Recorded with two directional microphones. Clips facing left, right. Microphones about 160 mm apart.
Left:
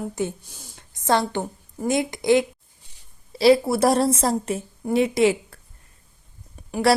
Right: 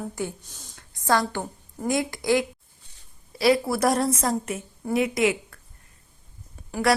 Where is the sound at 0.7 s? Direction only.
25° left (ahead or behind).